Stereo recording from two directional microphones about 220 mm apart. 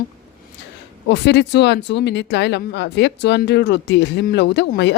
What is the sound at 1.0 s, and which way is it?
Speech, 50° left (ahead or behind).